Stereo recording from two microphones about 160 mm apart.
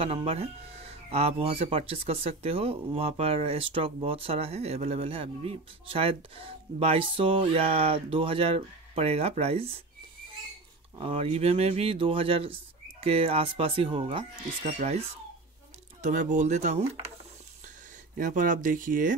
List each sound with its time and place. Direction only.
0.0 s speech: 35° right (ahead or behind)
11.0 s speech: 35° right (ahead or behind)
16.0 s speech: 50° right (ahead or behind)
18.1 s speech: 55° right (ahead or behind)